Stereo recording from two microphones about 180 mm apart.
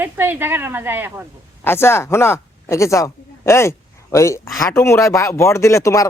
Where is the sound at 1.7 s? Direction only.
15° left (ahead or behind).